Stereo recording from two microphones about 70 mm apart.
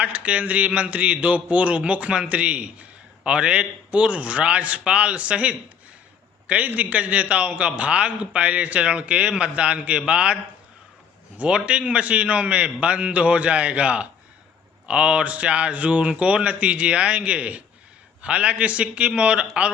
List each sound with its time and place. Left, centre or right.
0.0 s a man's voice: centre
11.3 s a man's voice: centre